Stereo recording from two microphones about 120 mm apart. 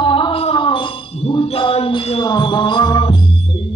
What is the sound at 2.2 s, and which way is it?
Music, 40° left (ahead or behind).